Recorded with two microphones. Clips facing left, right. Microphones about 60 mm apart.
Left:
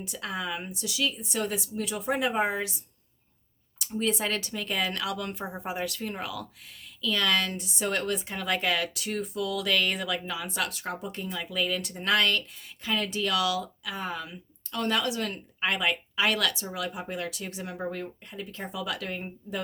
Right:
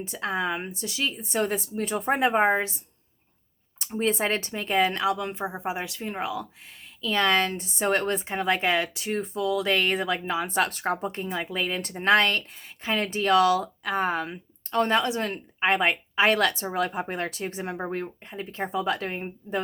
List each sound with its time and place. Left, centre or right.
0.0 s speech: right
3.8 s speech: right